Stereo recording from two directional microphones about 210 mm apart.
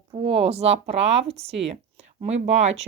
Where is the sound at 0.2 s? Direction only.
25° right (ahead or behind).